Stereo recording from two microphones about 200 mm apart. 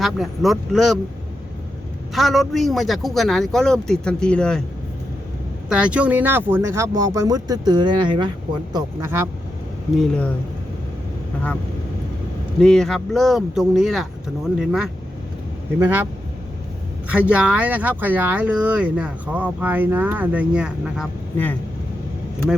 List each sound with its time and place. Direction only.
0.0 s speech: centre (ahead or behind)
2.1 s speech: centre (ahead or behind)
5.6 s speech: 5° right (ahead or behind); by 8.3 s 25° right (ahead or behind)
8.7 s speech: 15° right (ahead or behind)
10.0 s speech: 5° left (ahead or behind)
12.5 s speech: 5° left (ahead or behind)
17.1 s speech: 5° right (ahead or behind)